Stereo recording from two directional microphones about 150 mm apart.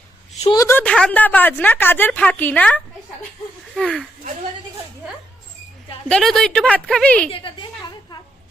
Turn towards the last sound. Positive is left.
turn(degrees=5)  # may be behind; listen again after turning